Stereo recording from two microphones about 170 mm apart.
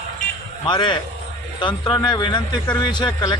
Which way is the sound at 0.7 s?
30° left (ahead or behind).